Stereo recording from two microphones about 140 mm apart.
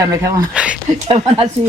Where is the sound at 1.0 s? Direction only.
45° right (ahead or behind).